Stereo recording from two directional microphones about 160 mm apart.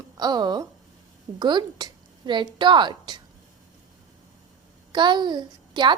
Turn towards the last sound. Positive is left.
turn(degrees=-30)  # may be behind; listen again after turning